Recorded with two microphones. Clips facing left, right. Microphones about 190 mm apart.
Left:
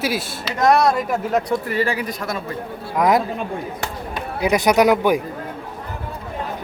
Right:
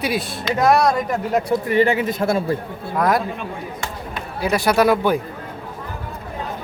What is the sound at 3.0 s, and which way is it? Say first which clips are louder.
Speech: left 2 dB; 20° left (ahead or behind).